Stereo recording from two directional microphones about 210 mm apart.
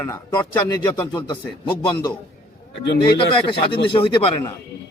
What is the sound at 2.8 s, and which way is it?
Speech, 55° left (ahead or behind).